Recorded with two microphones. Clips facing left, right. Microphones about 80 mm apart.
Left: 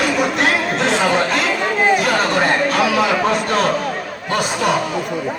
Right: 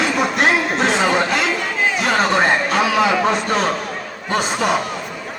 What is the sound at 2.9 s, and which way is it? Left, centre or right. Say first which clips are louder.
Speech: even; centre.